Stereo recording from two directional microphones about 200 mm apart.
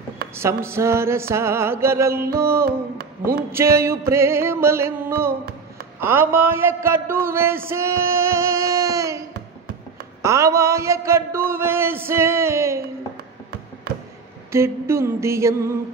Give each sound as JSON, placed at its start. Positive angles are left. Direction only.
{"t": 0.3, "sound": "a man's voice", "side_deg": -10}
{"t": 2.6, "sound": "speech", "side_deg": -50}
{"t": 3.5, "sound": "a man's voice", "side_deg": -15}
{"t": 10.2, "sound": "a man's voice", "side_deg": -15}
{"t": 14.5, "sound": "a man's voice", "side_deg": -15}